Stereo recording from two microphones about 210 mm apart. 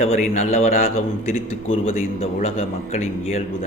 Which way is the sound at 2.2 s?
30° left (ahead or behind).